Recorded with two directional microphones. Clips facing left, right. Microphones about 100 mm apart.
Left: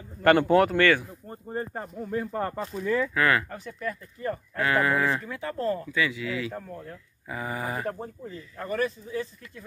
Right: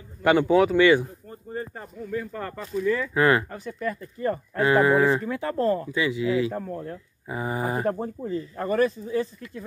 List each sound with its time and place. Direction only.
0.2 s speech: 5° right (ahead or behind)
1.3 s speech: 45° left (ahead or behind)
2.8 s speech: 10° left (ahead or behind)
3.2 s speech: 25° right (ahead or behind); by 5.9 s 45° right (ahead or behind)
5.9 s speech: 25° right (ahead or behind)